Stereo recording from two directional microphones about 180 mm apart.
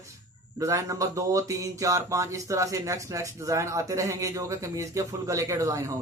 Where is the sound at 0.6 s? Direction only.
15° right (ahead or behind).